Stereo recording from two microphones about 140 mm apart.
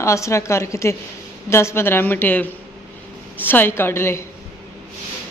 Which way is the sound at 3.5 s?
15° left (ahead or behind).